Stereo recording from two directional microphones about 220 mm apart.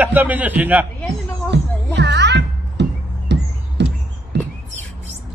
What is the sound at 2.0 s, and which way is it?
Music, 50° right (ahead or behind).